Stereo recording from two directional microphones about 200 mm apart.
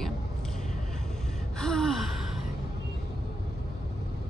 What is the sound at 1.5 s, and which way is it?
Speech, centre (ahead or behind).